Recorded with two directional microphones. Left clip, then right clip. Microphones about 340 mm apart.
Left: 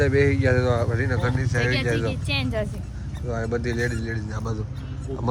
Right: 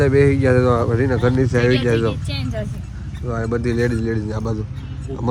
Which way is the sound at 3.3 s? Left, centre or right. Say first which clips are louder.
Right 4 dB; right.